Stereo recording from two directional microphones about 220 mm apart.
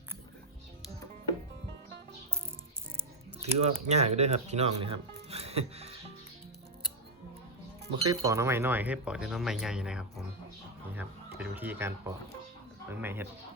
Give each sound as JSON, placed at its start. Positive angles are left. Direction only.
{"t": 3.4, "sound": "speech", "side_deg": -30}
{"t": 8.1, "sound": "speech", "side_deg": -15}
{"t": 11.3, "sound": "speech", "side_deg": -10}